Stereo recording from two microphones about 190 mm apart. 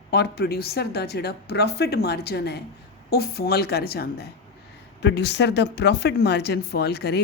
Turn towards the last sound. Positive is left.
turn(degrees=60)  # may be behind; listen again after turning